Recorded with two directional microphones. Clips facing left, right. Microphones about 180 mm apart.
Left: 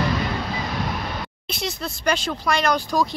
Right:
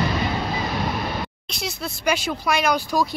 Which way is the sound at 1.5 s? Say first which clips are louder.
Left 5 dB; 5° right (ahead or behind).